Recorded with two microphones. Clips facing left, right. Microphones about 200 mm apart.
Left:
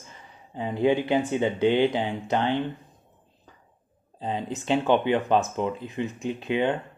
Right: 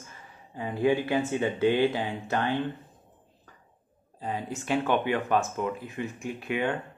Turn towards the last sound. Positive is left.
turn(degrees=20)  # may be behind; listen again after turning